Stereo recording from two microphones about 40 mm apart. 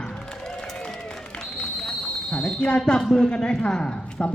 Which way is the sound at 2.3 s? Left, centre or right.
Left.